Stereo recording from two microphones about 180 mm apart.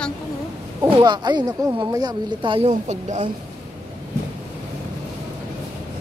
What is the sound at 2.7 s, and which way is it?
Speech, 40° right (ahead or behind).